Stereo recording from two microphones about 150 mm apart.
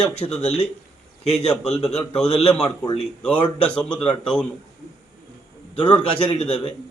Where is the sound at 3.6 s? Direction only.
10° left (ahead or behind).